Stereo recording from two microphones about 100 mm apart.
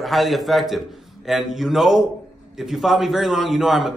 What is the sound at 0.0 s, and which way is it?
A man's voice, centre (ahead or behind).